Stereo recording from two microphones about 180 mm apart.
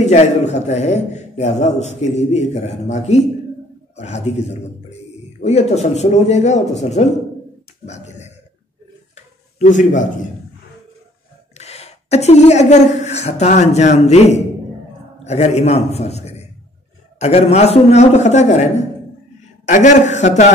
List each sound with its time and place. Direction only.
0.0 s a man's voice: 40° left (ahead or behind)
7.8 s a sound: 40° left (ahead or behind)
11.5 s a woman's voice: 35° left (ahead or behind)